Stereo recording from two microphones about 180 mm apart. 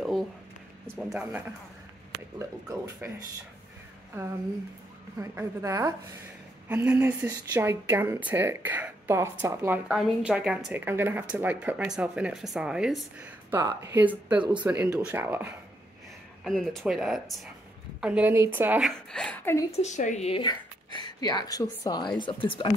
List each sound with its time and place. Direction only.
0.0 s a sound: centre (ahead or behind)
0.9 s speech: 5° right (ahead or behind)
2.3 s speech: 15° right (ahead or behind)
5.2 s speech: 15° right (ahead or behind)
9.8 s speech: 5° right (ahead or behind)
16.4 s speech: centre (ahead or behind)
18.9 s speech: 5° left (ahead or behind)
19.7 s speech: 40° left (ahead or behind); by 22.1 s 20° left (ahead or behind)